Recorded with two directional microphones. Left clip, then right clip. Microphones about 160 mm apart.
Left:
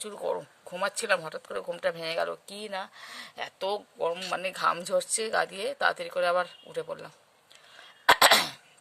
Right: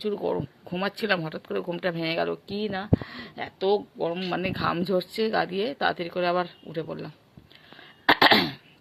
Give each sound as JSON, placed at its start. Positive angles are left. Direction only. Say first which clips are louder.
{"t": 0.0, "sound": "speech", "louder": "right 5 dB", "side_deg": 5}
{"t": 3.7, "sound": "speech", "louder": "right 5 dB", "side_deg": 25}
{"t": 4.3, "sound": "speech", "louder": "even", "side_deg": 10}
{"t": 7.8, "sound": "cough", "louder": "right 1 dB", "side_deg": 10}